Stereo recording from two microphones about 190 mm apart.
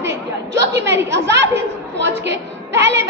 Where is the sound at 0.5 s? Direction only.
65° right (ahead or behind).